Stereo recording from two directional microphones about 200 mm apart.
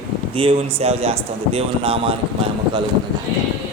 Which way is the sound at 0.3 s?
30° right (ahead or behind).